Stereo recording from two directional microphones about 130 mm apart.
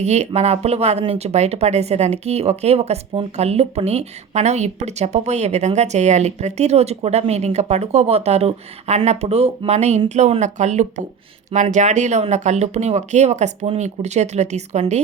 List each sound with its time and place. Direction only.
0.0 s speech: 60° right (ahead or behind)